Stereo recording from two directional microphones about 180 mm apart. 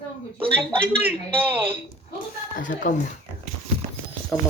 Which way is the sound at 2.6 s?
45° left (ahead or behind).